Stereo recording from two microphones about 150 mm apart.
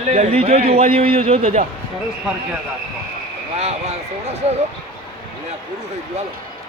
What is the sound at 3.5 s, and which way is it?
Speech, 45° right (ahead or behind).